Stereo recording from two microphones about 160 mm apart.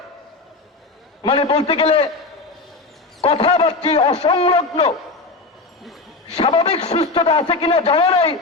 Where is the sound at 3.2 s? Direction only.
35° left (ahead or behind).